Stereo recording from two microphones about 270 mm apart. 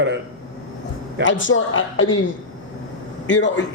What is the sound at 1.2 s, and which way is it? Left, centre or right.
Speech, left.